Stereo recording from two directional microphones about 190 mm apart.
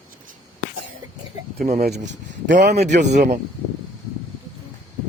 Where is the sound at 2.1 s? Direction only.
65° right (ahead or behind).